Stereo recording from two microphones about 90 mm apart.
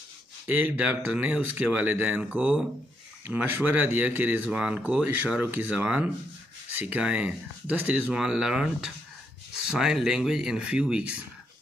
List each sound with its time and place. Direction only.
0.7 s speech: 15° right (ahead or behind)